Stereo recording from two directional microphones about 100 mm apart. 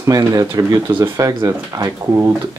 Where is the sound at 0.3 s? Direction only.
35° right (ahead or behind).